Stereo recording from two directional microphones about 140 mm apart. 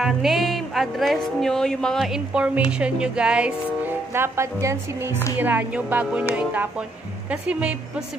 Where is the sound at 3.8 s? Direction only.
15° right (ahead or behind).